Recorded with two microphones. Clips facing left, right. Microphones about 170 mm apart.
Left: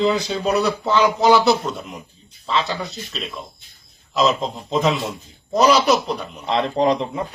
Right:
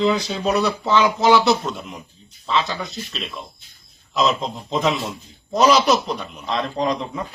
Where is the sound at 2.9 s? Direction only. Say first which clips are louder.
Even; centre (ahead or behind).